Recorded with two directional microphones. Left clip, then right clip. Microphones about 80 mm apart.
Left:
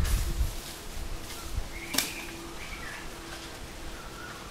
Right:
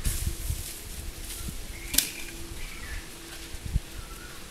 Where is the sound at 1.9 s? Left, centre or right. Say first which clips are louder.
Right 2 dB; right.